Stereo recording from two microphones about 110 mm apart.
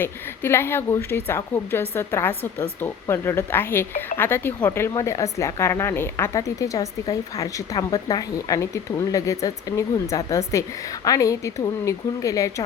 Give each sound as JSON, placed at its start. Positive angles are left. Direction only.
{"t": 0.0, "sound": "a woman's voice", "side_deg": 20}